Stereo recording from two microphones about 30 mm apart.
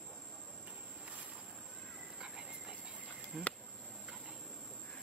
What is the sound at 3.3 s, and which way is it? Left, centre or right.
Insect, right.